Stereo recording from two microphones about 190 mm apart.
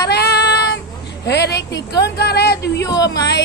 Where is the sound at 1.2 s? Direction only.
60° left (ahead or behind).